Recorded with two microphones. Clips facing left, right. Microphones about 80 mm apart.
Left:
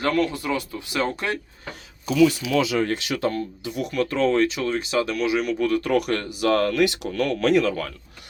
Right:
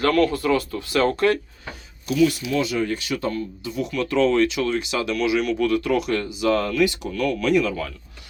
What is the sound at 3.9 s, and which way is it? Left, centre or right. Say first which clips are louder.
Speech: right 1 dB; left.